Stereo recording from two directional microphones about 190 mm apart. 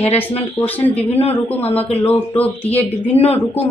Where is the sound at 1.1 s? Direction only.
30° left (ahead or behind).